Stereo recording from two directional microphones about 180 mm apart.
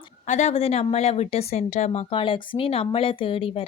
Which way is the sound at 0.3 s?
40° left (ahead or behind).